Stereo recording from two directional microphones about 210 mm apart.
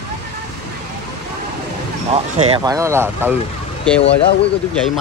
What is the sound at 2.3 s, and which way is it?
Speech, 30° right (ahead or behind).